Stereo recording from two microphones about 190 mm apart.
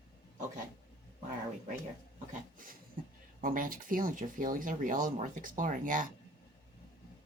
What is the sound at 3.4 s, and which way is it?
Speech, 45° right (ahead or behind).